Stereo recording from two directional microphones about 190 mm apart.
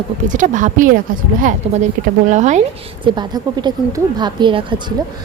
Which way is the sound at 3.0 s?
25° right (ahead or behind).